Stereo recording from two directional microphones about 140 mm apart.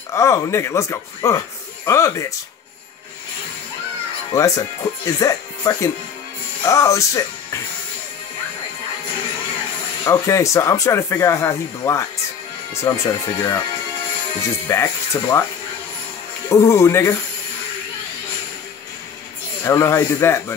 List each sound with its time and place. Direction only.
0.1 s speech: 20° left (ahead or behind)
4.3 s speech: 25° left (ahead or behind)
10.0 s speech: 20° left (ahead or behind)
14.7 s speech: 20° left (ahead or behind)
16.4 s speech: 20° left (ahead or behind)
19.6 s speech: 20° left (ahead or behind)